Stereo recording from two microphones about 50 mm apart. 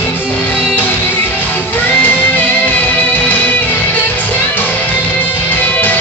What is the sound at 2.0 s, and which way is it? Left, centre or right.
Music, left.